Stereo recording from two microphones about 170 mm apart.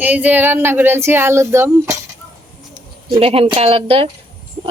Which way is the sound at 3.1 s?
35° right (ahead or behind).